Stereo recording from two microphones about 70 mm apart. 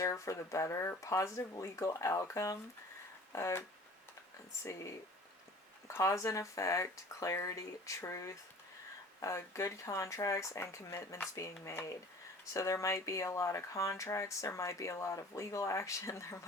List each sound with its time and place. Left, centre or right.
0.0 s speech: left
4.6 s speech: left